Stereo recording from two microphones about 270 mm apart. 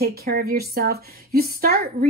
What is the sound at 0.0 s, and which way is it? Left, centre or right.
A woman's voice, right.